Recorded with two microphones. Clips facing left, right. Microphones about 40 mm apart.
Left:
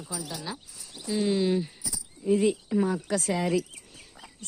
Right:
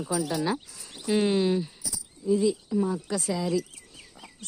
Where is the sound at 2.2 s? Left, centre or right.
Left.